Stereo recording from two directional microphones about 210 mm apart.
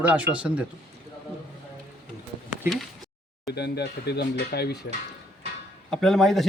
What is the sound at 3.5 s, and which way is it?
Speech, 50° left (ahead or behind).